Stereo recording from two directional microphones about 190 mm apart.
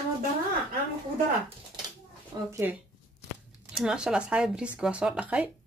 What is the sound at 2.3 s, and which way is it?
Speech, 25° right (ahead or behind).